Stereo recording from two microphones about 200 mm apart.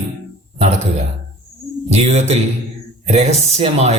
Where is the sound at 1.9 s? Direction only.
35° right (ahead or behind).